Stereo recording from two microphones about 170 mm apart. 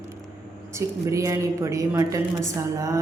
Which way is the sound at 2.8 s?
20° right (ahead or behind).